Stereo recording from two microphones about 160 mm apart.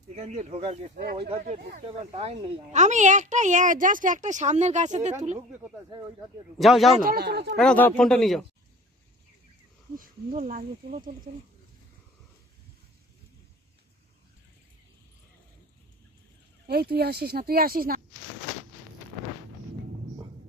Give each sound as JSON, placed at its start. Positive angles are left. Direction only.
{"t": 0.1, "sound": "a woman's voice", "side_deg": -45}
{"t": 1.4, "sound": "speech", "side_deg": -60}
{"t": 2.1, "sound": "a woman's voice", "side_deg": -40}
{"t": 6.6, "sound": "speech", "side_deg": 0}
{"t": 7.0, "sound": "speech", "side_deg": -70}
{"t": 7.5, "sound": "speech", "side_deg": 5}
{"t": 10.0, "sound": "speech", "side_deg": -55}
{"t": 11.3, "sound": "speech", "side_deg": -40}
{"t": 16.6, "sound": "speech", "side_deg": -75}